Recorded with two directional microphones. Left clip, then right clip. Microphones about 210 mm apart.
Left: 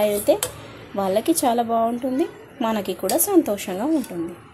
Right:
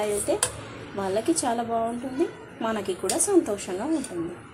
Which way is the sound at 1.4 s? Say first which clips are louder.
Left 6 dB; 55° left (ahead or behind).